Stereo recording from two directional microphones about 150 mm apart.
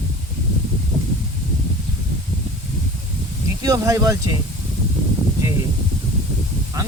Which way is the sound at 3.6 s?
25° right (ahead or behind).